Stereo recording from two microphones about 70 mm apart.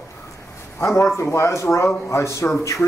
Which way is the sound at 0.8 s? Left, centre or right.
Left.